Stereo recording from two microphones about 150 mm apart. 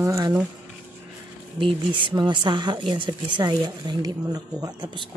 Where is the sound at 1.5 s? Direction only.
35° right (ahead or behind).